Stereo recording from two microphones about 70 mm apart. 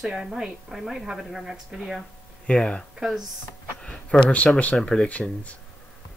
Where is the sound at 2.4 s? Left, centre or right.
Centre.